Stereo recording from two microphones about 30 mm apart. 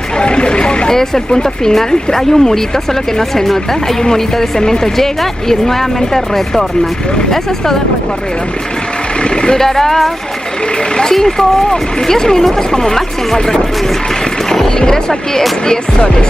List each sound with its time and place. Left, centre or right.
0.2 s vehicle: left
0.8 s speech: centre
9.2 s vehicle: left
9.6 s speech: centre
11.1 s speech: centre